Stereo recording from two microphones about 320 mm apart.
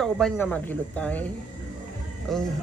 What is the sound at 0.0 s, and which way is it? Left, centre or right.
Speech, centre.